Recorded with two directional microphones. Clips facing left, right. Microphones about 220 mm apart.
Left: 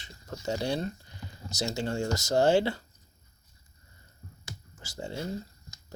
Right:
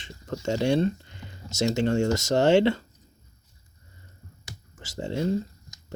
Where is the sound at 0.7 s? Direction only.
25° right (ahead or behind).